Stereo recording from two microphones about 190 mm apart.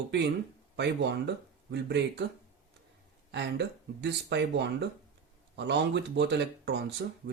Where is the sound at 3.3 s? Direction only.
65° right (ahead or behind).